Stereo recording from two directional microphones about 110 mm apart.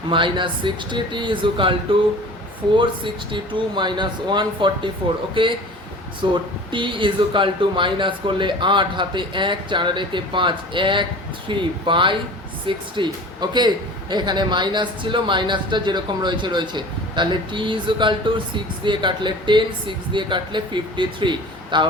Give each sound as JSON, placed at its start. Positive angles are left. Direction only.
{"t": 0.1, "sound": "speech", "side_deg": -50}